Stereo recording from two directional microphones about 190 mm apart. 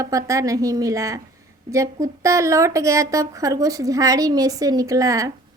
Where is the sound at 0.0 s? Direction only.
15° right (ahead or behind).